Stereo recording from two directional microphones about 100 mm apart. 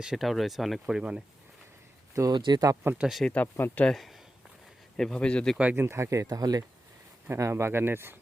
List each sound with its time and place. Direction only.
0.0 s speech: 5° right (ahead or behind)
2.3 s speech: 45° right (ahead or behind)
3.0 s speech: centre (ahead or behind)
3.3 s speech: 20° left (ahead or behind)
3.8 s speech: centre (ahead or behind)
5.7 s speech: 25° right (ahead or behind)
7.3 s speech: 25° right (ahead or behind)